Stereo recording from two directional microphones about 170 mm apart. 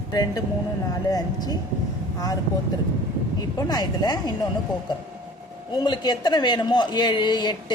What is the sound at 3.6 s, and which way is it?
Speech, 25° left (ahead or behind).